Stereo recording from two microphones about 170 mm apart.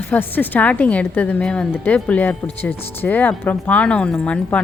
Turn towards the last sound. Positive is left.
turn(degrees=5)  # may be behind; listen again after turning